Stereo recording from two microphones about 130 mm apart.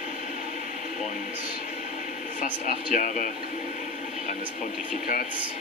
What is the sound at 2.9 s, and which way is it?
Speech, 75° left (ahead or behind).